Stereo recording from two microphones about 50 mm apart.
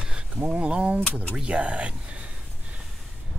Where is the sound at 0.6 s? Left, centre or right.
Right.